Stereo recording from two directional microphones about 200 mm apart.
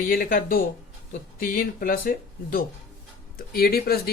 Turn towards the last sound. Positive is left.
turn(degrees=50)  # may be behind; listen again after turning